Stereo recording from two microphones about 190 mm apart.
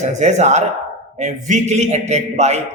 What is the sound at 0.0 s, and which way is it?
A man's voice, 35° right (ahead or behind).